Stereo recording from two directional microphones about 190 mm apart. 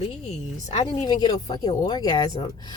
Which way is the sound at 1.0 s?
20° left (ahead or behind).